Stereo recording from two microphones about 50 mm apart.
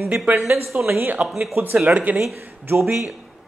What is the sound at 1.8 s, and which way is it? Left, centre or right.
Speech, right.